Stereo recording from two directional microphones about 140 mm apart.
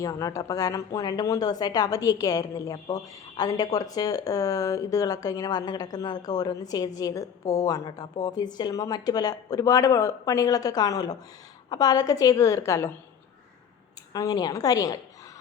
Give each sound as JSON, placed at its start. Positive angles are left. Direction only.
{"t": 0.0, "sound": "speech", "side_deg": 25}
{"t": 14.1, "sound": "speech", "side_deg": 25}